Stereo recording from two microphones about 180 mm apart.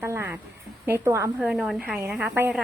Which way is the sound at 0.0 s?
15° right (ahead or behind).